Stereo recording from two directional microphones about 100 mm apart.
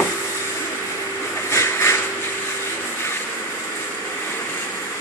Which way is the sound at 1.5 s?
30° left (ahead or behind).